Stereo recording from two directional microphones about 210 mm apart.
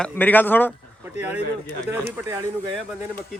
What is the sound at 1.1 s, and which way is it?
Speech, 5° right (ahead or behind).